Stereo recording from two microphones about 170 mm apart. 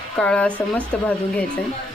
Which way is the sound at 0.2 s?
5° left (ahead or behind).